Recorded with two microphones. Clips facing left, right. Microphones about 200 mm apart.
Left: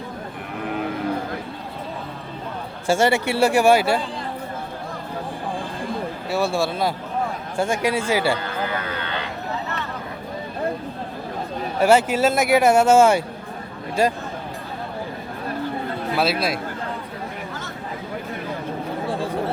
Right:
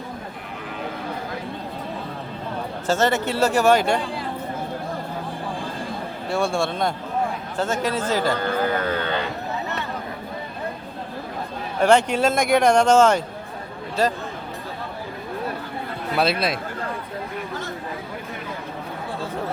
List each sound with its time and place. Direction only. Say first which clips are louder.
2.8 s speech: left 2 dB; 10° left (ahead or behind)
6.3 s speech: left 1 dB; 5° left (ahead or behind)
8.4 s a sound: right 4 dB; 45° right (ahead or behind)
11.8 s speech: left 1 dB; 5° left (ahead or behind)
16.1 s speech: right 1 dB; centre (ahead or behind)